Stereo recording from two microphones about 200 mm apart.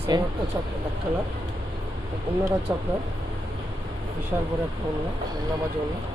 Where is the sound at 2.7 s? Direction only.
15° right (ahead or behind).